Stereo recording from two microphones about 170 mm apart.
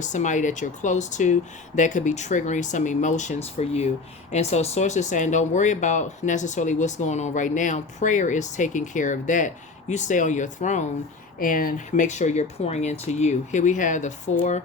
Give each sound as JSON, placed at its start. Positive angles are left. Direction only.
{"t": 0.0, "sound": "speech", "side_deg": 45}